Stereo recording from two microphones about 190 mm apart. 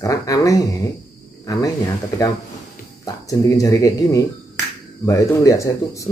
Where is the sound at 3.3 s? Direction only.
15° left (ahead or behind).